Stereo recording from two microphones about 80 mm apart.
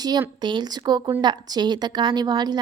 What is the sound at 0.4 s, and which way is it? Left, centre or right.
A woman's voice, right.